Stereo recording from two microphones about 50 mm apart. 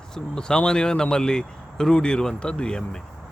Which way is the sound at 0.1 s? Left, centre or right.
Centre.